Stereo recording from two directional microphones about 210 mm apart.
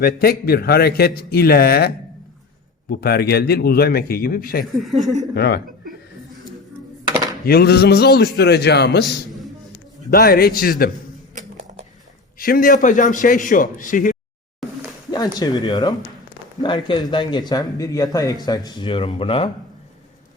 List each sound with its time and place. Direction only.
0.0 s speech: 45° left (ahead or behind)
2.9 s speech: 50° left (ahead or behind)
4.6 s speech: centre (ahead or behind)
5.3 s speech: 50° left (ahead or behind)
7.4 s speech: 50° left (ahead or behind)
10.1 s speech: 45° left (ahead or behind)
12.4 s speech: 40° left (ahead or behind)
15.1 s speech: 20° left (ahead or behind)